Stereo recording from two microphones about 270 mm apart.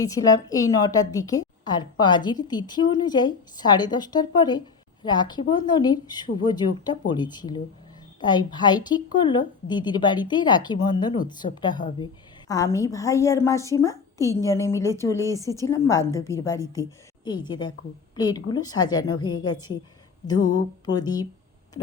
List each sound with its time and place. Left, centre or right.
0.0 s a woman's voice: centre
20.8 s a woman's voice: centre